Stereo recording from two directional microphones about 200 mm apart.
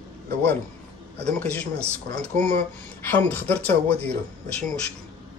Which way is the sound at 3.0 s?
10° left (ahead or behind).